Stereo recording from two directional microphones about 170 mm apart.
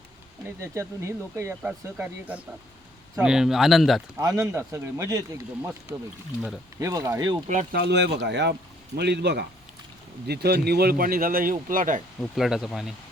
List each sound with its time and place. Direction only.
0.4 s speech: 15° right (ahead or behind); by 4.0 s centre (ahead or behind)
4.2 s speech: 15° right (ahead or behind)
6.7 s speech: 20° right (ahead or behind)
7.7 s speech: 75° right (ahead or behind); by 8.5 s 90° right
9.0 s speech: 80° right; by 12.0 s 50° right (ahead or behind)
12.2 s speech: centre (ahead or behind)